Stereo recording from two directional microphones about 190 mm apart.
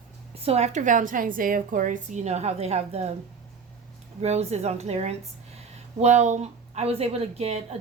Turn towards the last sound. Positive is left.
turn(degrees=-35)  # may be behind; listen again after turning